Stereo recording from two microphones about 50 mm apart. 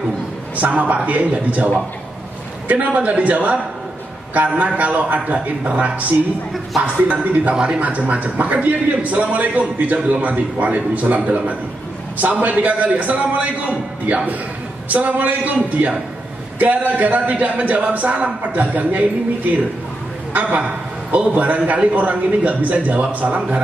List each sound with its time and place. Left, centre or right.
0.6 s a man's voice: right
2.7 s a man's voice: right
7.5 s a man's voice: right